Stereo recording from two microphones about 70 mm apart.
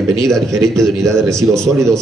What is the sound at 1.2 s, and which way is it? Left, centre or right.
Speech, centre.